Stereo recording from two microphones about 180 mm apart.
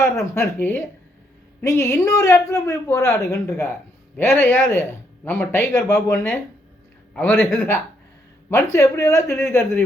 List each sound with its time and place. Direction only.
0.0 s speech: 15° left (ahead or behind)
4.2 s speech: 10° left (ahead or behind)